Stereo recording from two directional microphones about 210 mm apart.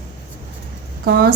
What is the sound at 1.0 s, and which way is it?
Speech, 50° right (ahead or behind).